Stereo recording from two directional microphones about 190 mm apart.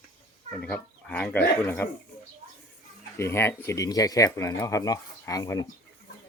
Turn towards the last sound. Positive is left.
turn(degrees=20)  # may be behind; listen again after turning